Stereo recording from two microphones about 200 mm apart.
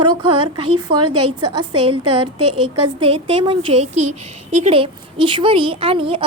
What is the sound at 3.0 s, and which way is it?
A woman's voice, 25° right (ahead or behind).